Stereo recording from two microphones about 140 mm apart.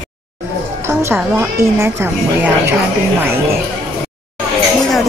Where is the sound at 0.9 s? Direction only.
20° right (ahead or behind).